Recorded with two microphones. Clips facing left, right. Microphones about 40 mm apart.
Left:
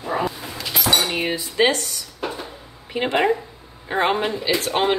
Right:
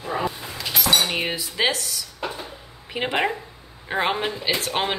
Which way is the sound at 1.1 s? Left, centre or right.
Centre.